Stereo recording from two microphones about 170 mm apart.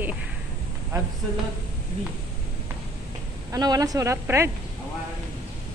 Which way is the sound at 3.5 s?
20° right (ahead or behind).